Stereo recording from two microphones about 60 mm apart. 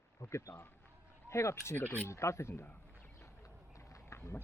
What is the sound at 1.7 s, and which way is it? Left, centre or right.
Speech, left.